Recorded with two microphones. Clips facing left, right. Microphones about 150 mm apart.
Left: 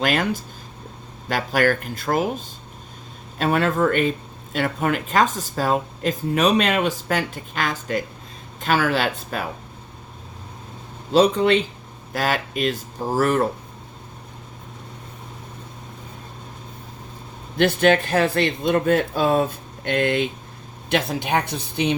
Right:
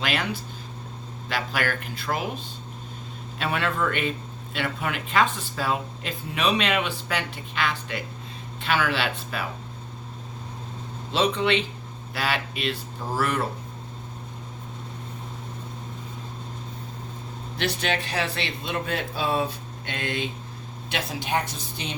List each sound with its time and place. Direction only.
0.0 s speech: 45° left (ahead or behind)
11.1 s speech: 40° left (ahead or behind)
17.6 s speech: 50° left (ahead or behind)